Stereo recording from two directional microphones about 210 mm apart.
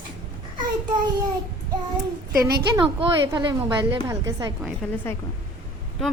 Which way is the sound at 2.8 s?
20° right (ahead or behind).